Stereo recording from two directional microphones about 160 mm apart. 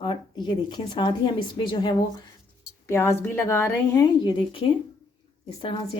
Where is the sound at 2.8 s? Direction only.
15° left (ahead or behind).